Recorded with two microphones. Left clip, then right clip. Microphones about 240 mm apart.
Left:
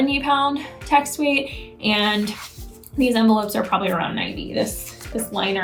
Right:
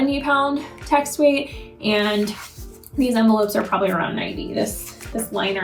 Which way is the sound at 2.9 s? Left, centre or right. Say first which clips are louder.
Even; left.